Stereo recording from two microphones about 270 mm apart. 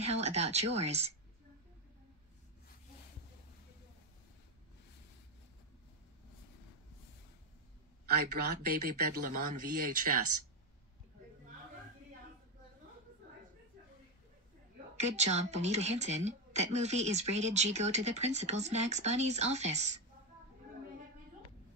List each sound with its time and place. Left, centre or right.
0.0 s a woman's voice: right
8.1 s speech: right
15.0 s a woman's voice: right